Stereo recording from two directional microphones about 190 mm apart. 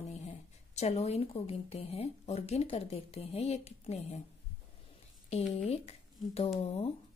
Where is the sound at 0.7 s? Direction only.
35° left (ahead or behind).